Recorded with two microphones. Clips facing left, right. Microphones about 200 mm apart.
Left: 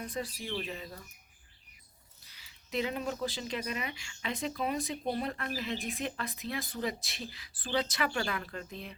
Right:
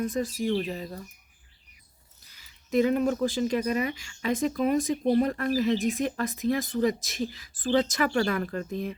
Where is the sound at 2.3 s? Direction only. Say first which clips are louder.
Right 9 dB; 45° right (ahead or behind).